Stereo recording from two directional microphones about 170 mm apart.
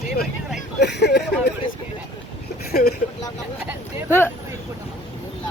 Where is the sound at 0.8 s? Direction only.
85° left.